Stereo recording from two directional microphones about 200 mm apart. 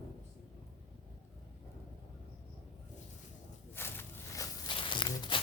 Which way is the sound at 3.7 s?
10° left (ahead or behind).